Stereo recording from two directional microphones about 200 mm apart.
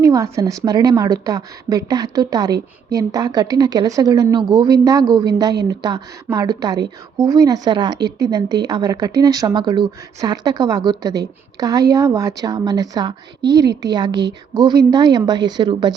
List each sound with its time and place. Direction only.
0.0 s speech: 15° right (ahead or behind)